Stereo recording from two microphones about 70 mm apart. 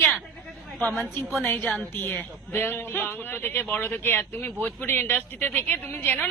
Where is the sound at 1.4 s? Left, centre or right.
Left.